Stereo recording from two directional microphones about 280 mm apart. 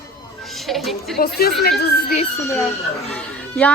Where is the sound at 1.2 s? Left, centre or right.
Left.